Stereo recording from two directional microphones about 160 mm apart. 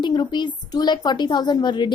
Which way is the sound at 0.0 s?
30° left (ahead or behind).